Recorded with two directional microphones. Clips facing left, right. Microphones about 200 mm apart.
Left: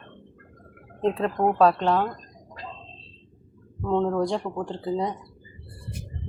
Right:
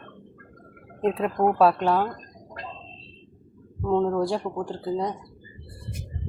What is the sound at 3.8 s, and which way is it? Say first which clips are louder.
Speech: right 1 dB; 5° right (ahead or behind).